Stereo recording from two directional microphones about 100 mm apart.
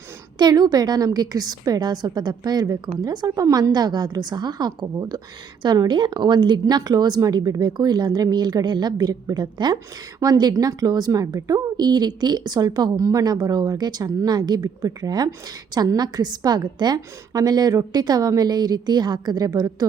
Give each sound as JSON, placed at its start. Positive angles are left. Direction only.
{"t": 0.3, "sound": "a woman's voice", "side_deg": -45}